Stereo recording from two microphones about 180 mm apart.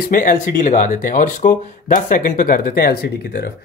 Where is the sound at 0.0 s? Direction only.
50° left (ahead or behind).